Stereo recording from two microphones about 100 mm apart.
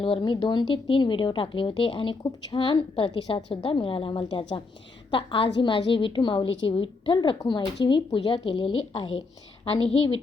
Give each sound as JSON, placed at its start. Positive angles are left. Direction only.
{"t": 0.0, "sound": "a woman's voice", "side_deg": 55}